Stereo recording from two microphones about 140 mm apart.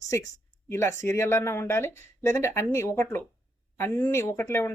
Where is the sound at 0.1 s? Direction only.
20° left (ahead or behind).